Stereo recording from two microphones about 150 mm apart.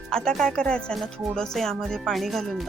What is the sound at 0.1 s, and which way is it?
Music, 5° left (ahead or behind).